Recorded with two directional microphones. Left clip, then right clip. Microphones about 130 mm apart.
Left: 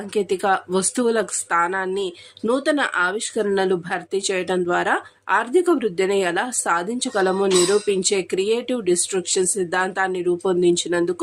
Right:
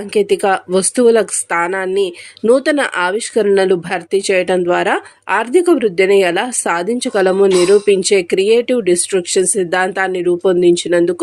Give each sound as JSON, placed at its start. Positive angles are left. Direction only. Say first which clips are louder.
{"t": 0.1, "sound": "speech", "louder": "right 7 dB", "side_deg": -20}